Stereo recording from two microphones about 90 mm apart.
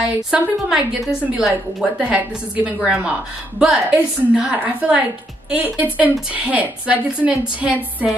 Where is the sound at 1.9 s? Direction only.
15° right (ahead or behind).